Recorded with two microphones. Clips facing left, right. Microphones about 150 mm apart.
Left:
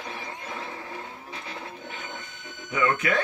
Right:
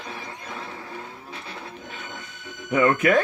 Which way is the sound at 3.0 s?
50° right (ahead or behind).